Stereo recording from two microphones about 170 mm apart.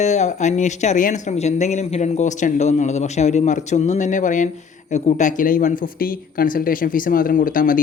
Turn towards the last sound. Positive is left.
turn(degrees=55)  # may be behind; listen again after turning